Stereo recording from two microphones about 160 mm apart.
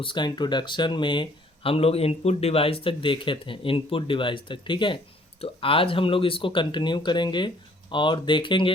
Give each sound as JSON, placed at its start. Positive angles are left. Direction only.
{"t": 0.0, "sound": "speech", "side_deg": 30}